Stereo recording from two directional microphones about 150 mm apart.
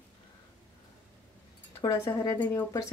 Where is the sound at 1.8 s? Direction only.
20° left (ahead or behind).